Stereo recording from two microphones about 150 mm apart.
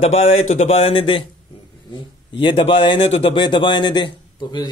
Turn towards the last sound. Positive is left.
turn(degrees=30)  # may be behind; listen again after turning